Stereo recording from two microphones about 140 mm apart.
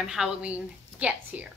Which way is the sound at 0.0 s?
5° right (ahead or behind).